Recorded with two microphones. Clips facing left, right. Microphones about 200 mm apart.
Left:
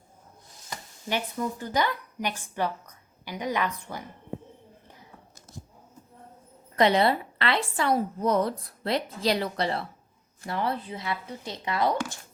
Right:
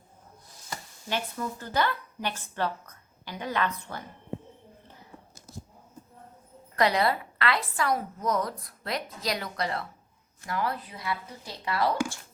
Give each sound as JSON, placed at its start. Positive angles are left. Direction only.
{"t": 1.1, "sound": "a woman's voice", "side_deg": 15}
{"t": 6.7, "sound": "a woman's voice", "side_deg": 25}